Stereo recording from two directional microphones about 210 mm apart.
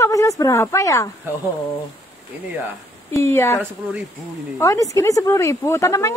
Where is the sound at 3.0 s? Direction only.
15° left (ahead or behind).